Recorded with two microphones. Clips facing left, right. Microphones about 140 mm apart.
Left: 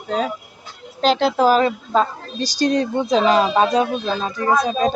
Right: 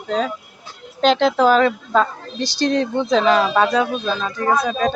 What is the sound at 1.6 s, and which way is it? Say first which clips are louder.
Speech: right 1 dB; 35° left (ahead or behind).